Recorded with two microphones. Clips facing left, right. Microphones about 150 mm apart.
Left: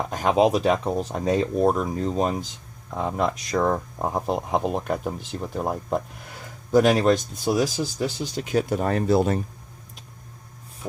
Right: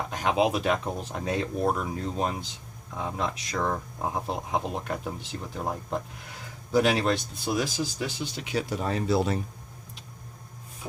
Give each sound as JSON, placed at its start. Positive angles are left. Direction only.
{"t": 0.1, "sound": "speech", "side_deg": 45}
{"t": 2.9, "sound": "speech", "side_deg": 50}
{"t": 6.7, "sound": "speech", "side_deg": 45}